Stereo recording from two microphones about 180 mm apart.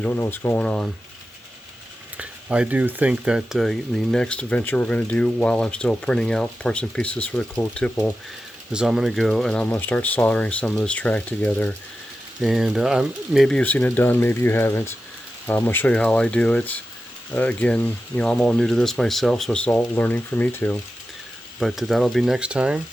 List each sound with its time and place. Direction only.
0.0 s speech: 10° left (ahead or behind)
2.1 s speech: 5° right (ahead or behind)
8.7 s speech: 5° right (ahead or behind)
12.4 s speech: 5° right (ahead or behind)
21.6 s speech: centre (ahead or behind)